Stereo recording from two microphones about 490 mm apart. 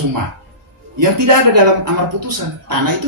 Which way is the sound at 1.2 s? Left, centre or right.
Right.